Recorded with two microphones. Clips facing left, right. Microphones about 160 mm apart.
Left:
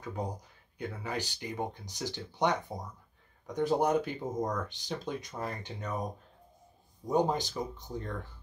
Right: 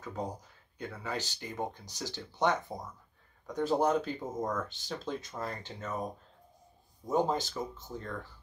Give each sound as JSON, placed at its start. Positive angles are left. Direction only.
{"t": 0.0, "sound": "speech", "side_deg": 10}
{"t": 7.1, "sound": "speech", "side_deg": 15}